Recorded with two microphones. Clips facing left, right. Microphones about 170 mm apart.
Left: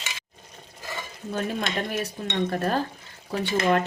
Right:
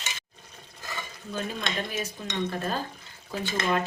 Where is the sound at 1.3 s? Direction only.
60° left (ahead or behind).